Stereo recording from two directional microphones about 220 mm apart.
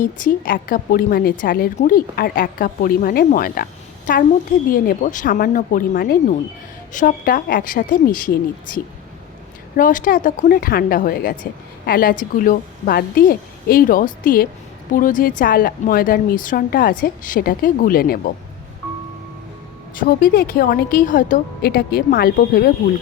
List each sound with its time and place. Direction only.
0.0 s a woman's voice: 40° left (ahead or behind)
20.0 s a woman's voice: 40° left (ahead or behind)